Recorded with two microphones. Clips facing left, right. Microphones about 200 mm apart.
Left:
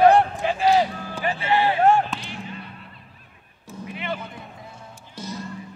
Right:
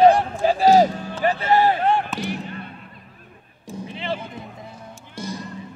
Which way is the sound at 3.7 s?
30° right (ahead or behind).